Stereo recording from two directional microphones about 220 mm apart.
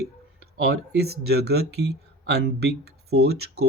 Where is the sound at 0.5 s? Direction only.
50° right (ahead or behind).